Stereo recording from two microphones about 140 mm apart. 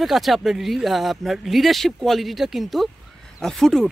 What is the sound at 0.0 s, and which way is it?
Speech, centre (ahead or behind).